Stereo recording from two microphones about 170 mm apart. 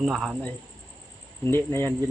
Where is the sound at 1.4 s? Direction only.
15° left (ahead or behind).